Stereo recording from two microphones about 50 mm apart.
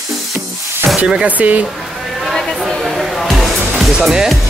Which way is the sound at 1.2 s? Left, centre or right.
Right.